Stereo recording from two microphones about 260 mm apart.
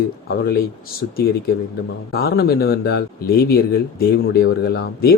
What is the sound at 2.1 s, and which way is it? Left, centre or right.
A man's voice, left.